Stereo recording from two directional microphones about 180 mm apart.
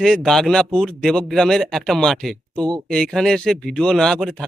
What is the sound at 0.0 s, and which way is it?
Speech, centre (ahead or behind).